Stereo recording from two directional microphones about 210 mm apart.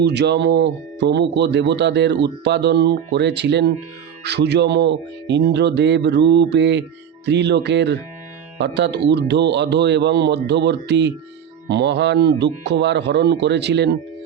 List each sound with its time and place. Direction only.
0.0 s speech: 55° right (ahead or behind)